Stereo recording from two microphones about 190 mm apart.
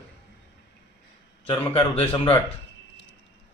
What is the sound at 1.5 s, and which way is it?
Speech, 30° left (ahead or behind).